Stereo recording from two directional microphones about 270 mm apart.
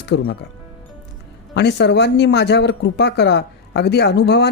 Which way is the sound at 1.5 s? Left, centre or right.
Left.